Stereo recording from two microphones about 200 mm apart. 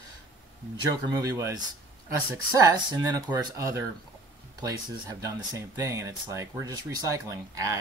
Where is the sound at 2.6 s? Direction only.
20° right (ahead or behind).